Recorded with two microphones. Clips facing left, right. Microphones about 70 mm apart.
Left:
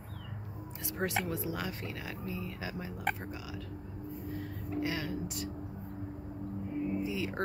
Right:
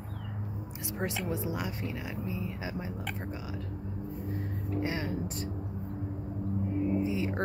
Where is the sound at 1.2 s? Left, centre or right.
Right.